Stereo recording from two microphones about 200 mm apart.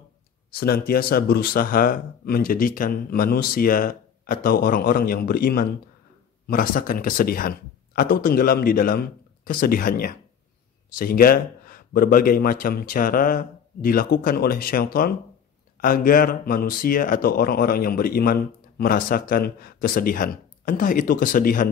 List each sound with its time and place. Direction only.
0.5 s speech: 50° left (ahead or behind)